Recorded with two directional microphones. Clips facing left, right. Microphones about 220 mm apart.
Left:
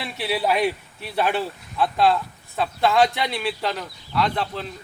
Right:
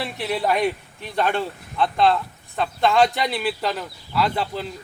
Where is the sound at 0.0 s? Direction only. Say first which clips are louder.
Even; centre (ahead or behind).